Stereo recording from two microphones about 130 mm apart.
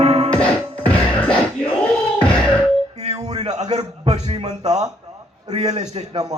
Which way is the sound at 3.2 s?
60° right (ahead or behind).